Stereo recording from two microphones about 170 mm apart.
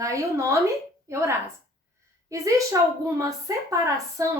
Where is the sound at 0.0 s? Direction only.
20° right (ahead or behind).